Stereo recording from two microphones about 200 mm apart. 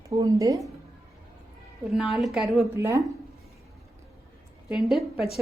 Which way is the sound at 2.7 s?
15° right (ahead or behind).